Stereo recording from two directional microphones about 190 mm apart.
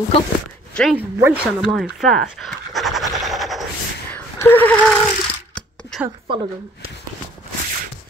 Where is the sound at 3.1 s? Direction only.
Centre (ahead or behind).